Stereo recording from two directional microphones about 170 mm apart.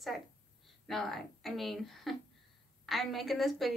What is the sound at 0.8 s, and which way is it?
A woman's voice, centre (ahead or behind).